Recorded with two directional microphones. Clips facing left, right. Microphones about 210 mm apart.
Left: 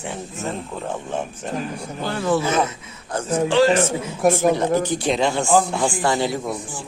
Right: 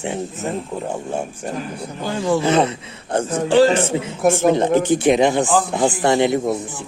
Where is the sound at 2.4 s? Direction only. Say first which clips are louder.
Right 5 dB; 35° right (ahead or behind).